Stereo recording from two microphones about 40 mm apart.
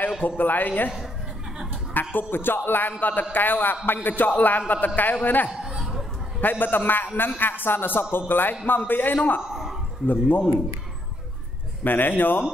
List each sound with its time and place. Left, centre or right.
0.4 s a man's voice: left
2.0 s speech: left
3.0 s a man's voice: left
5.5 s a sound: centre
6.4 s a man's voice: left
9.4 s a sound: centre
10.0 s a man's voice: left
11.8 s speech: left